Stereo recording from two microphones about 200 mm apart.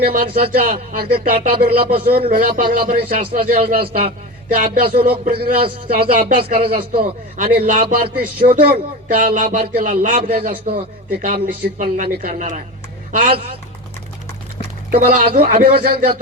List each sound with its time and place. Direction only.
0.0 s a man's voice: 45° right (ahead or behind)
10.5 s speech: 25° right (ahead or behind)
11.1 s a man's voice: 50° right (ahead or behind)
15.4 s speech: 45° right (ahead or behind)